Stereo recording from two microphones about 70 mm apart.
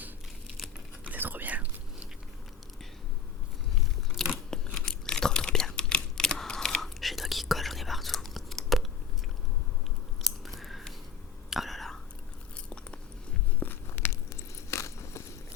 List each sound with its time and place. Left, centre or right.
1.0 s whispering: right
4.3 s tearing: centre
10.2 s biting: centre
11.5 s whispering: centre
13.6 s biting: left
14.7 s a sound: left